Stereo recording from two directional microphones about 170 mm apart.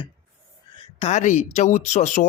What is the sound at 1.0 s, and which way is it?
Speech, 45° left (ahead or behind).